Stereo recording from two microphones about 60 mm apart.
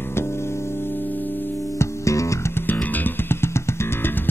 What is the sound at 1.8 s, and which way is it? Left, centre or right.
Music, left.